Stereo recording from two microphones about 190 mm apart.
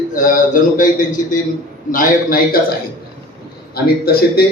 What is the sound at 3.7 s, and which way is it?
Speech, 55° left (ahead or behind).